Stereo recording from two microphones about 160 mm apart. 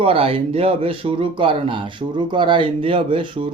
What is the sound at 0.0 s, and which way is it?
Speech, 35° right (ahead or behind).